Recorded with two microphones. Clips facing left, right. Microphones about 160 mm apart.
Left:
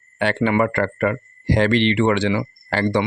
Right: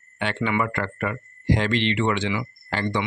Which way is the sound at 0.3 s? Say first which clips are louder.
Left 6 dB; 40° left (ahead or behind).